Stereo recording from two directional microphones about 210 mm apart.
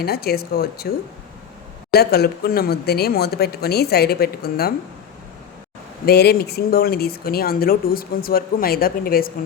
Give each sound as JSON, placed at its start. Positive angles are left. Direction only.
{"t": 0.0, "sound": "speech", "side_deg": 50}
{"t": 1.9, "sound": "speech", "side_deg": 50}
{"t": 6.1, "sound": "speech", "side_deg": 50}